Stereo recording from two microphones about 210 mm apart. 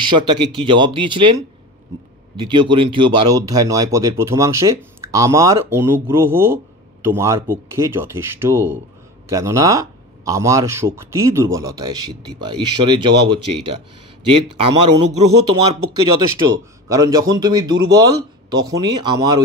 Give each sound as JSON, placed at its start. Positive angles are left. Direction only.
{"t": 0.0, "sound": "speech", "side_deg": -20}
{"t": 16.4, "sound": "speech", "side_deg": -15}